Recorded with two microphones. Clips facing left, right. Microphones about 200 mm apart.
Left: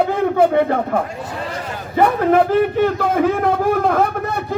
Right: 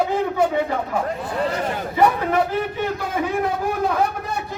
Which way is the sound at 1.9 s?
55° left (ahead or behind).